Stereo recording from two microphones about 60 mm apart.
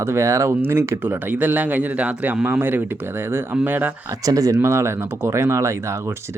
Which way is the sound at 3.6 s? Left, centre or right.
Right.